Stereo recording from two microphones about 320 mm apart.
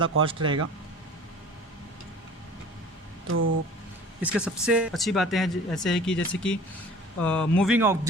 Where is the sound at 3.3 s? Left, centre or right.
Right.